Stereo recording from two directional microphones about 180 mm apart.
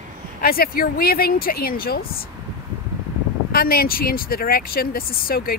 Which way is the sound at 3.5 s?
55° left (ahead or behind).